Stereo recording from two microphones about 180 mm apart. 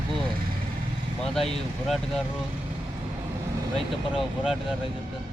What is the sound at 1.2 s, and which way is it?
Speech, centre (ahead or behind).